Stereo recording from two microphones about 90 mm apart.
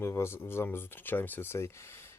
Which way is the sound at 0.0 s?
30° left (ahead or behind).